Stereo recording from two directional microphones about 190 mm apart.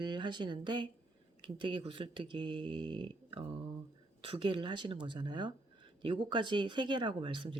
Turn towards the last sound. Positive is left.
turn(degrees=-25)  # may be behind; listen again after turning